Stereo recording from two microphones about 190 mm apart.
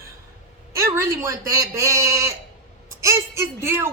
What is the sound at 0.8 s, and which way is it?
A woman's voice, 15° right (ahead or behind).